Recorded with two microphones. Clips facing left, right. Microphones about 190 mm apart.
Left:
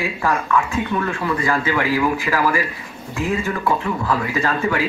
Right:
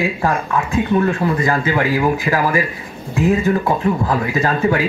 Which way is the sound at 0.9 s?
40° right (ahead or behind).